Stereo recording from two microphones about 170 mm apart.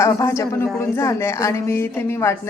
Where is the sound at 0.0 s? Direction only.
15° left (ahead or behind).